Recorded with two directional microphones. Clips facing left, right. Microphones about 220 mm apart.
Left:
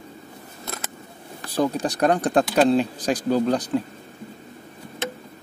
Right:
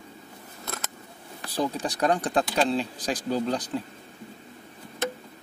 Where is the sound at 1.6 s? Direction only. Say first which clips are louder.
Left 5 dB; 50° left (ahead or behind).